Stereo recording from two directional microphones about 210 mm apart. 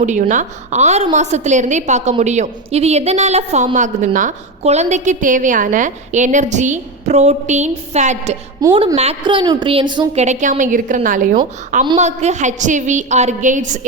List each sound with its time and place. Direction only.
0.0 s a woman's voice: 35° right (ahead or behind)
8.6 s a woman's voice: 20° right (ahead or behind); by 13.7 s 35° right (ahead or behind)